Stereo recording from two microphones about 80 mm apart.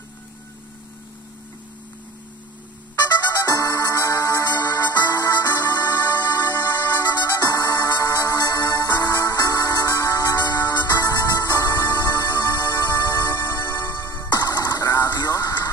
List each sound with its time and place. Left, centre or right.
3.4 s music: left
13.7 s music: left
14.3 s music: left